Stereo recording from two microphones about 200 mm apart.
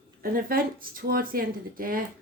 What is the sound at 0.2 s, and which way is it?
Speech, 45° right (ahead or behind).